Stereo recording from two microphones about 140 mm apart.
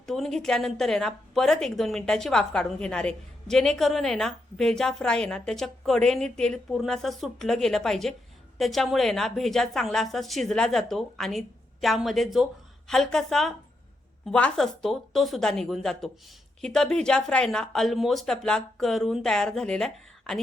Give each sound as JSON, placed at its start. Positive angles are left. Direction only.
{"t": 0.0, "sound": "a woman's voice", "side_deg": 0}